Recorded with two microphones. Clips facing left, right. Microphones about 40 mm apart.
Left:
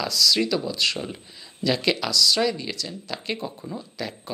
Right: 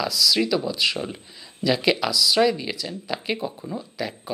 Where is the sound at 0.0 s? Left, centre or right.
Centre.